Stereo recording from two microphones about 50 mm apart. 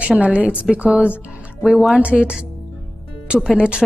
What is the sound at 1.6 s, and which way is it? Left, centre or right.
Speech, centre.